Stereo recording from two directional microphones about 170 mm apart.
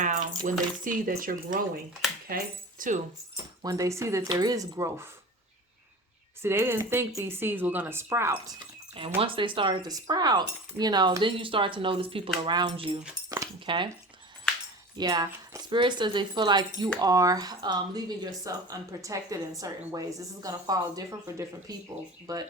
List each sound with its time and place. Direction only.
0.0 s keys jangling: 45° right (ahead or behind)
0.9 s speech: 55° right (ahead or behind)
3.3 s speech: 20° right (ahead or behind)
6.4 s speech: 15° right (ahead or behind)
8.5 s speech: 30° right (ahead or behind)
14.9 s speech: 25° right (ahead or behind)